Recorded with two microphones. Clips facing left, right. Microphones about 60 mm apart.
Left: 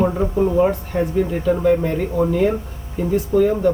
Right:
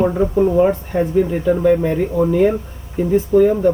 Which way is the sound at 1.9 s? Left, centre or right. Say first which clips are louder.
Right 3 dB; centre.